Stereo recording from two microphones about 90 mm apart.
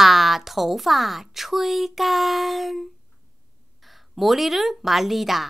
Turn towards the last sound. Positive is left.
turn(degrees=0)  # may be behind; listen again after turning